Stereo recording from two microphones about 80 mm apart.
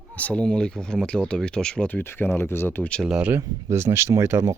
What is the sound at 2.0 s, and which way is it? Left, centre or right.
Speech, left.